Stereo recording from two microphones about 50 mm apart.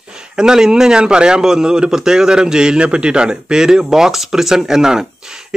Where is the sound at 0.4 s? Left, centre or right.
Centre.